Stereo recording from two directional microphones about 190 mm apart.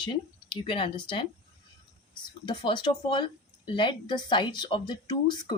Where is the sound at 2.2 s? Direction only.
25° left (ahead or behind).